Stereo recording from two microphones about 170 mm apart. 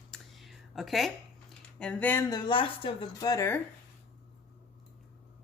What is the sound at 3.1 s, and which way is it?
Speech, 20° left (ahead or behind).